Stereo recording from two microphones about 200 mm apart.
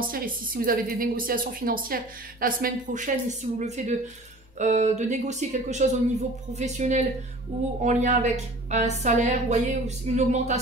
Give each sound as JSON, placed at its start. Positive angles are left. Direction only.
{"t": 0.0, "sound": "a woman's voice", "side_deg": -45}